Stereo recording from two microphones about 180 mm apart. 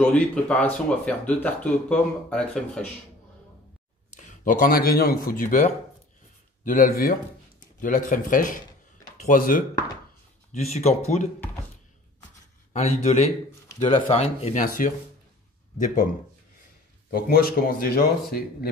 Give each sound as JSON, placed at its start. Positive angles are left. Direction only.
{"t": 0.0, "sound": "speech", "side_deg": 5}
{"t": 4.2, "sound": "speech", "side_deg": 45}
{"t": 10.5, "sound": "speech", "side_deg": 35}
{"t": 12.7, "sound": "speech", "side_deg": 35}
{"t": 17.1, "sound": "a man's voice", "side_deg": 55}